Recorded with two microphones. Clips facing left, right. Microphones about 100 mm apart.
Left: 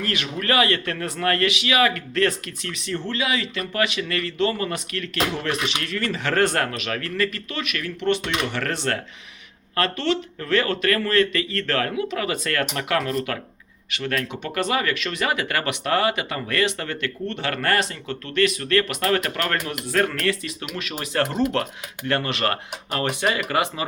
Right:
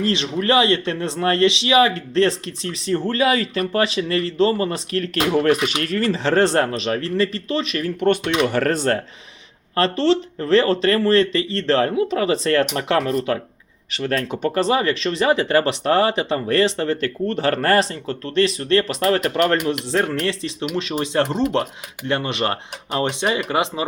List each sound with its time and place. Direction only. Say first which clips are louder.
0.0 s a man's voice: right 6 dB; 25° right (ahead or behind)
8.0 s a man's voice: right 5 dB; 50° right (ahead or behind); by 21.2 s 25° right (ahead or behind)
21.2 s speech: right 2 dB; 5° left (ahead or behind)
22.0 s speech: right 2 dB; 20° right (ahead or behind)